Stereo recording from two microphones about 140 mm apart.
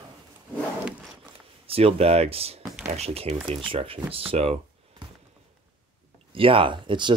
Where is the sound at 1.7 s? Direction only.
45° right (ahead or behind).